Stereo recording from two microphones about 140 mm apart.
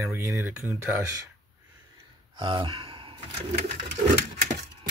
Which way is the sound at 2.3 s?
35° right (ahead or behind).